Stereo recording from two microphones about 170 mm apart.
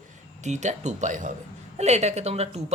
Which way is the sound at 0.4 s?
45° right (ahead or behind).